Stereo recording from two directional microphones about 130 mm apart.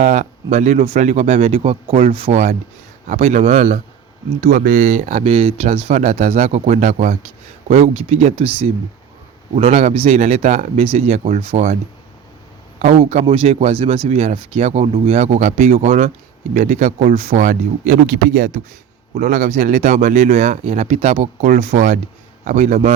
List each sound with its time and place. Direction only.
0.0 s speech: 65° right (ahead or behind)
4.4 s speech: 90° right; by 5.3 s 65° right (ahead or behind)
5.3 s speech: 45° right (ahead or behind); by 7.2 s 65° right (ahead or behind)
7.7 s speech: 50° right (ahead or behind)
12.8 s speech: 55° right (ahead or behind); by 20.3 s 75° right (ahead or behind)
20.3 s speech: 55° right (ahead or behind); by 21.6 s 80° right
21.6 s speech: 65° right (ahead or behind)